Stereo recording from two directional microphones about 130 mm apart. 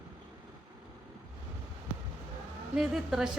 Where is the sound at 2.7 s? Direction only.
5° right (ahead or behind).